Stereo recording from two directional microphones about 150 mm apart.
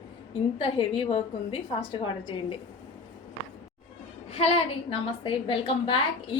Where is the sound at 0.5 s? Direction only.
40° left (ahead or behind).